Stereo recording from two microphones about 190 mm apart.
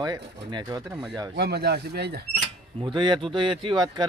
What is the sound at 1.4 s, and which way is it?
Speech, 60° right (ahead or behind).